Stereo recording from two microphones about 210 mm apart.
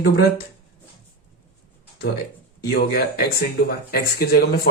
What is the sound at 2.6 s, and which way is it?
Speech, 50° left (ahead or behind).